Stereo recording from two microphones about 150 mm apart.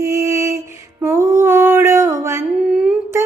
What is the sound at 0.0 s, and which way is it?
Mantra, 20° right (ahead or behind).